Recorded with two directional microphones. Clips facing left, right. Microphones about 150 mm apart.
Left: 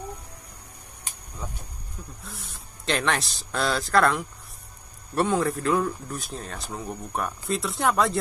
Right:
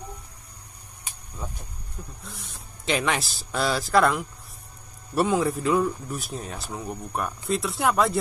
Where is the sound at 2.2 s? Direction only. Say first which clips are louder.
Even; centre (ahead or behind).